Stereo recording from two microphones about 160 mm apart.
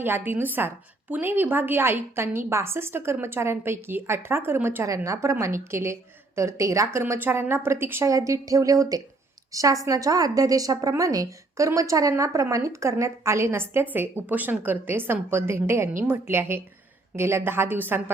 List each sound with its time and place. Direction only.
0.0 s a woman's voice: 15° right (ahead or behind)